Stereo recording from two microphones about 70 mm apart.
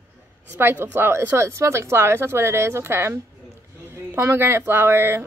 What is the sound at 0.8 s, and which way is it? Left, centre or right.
Speech, right.